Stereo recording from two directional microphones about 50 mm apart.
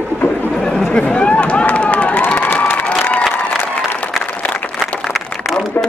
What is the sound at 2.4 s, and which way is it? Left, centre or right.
Crowd, left.